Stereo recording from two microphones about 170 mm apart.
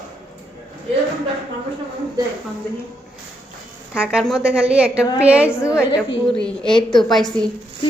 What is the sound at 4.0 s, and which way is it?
A woman's voice, 5° right (ahead or behind).